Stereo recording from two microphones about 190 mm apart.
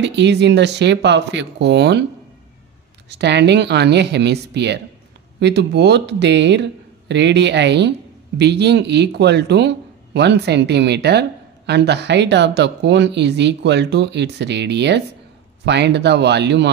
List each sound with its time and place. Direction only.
0.0 s speech: 65° right (ahead or behind)
3.1 s speech: 65° right (ahead or behind)